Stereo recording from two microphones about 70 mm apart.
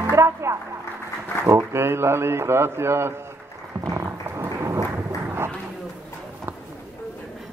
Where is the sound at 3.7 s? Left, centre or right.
Right.